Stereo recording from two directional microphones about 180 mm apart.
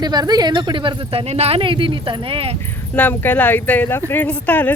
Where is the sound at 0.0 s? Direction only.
25° right (ahead or behind).